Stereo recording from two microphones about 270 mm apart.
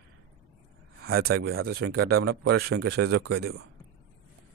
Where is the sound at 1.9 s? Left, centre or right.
Right.